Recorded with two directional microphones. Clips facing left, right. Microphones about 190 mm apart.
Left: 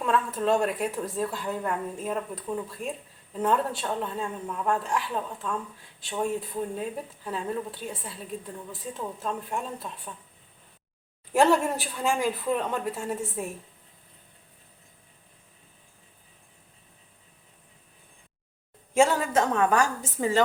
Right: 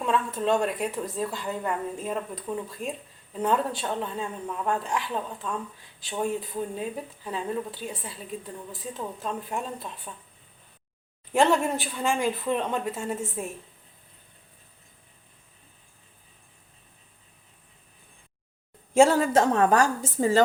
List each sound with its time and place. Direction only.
0.0 s a woman's voice: centre (ahead or behind)
11.3 s a woman's voice: 5° left (ahead or behind)
18.9 s a woman's voice: 30° right (ahead or behind)